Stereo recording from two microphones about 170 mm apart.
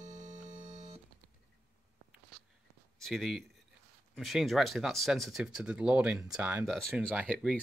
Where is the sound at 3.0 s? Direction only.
Centre (ahead or behind).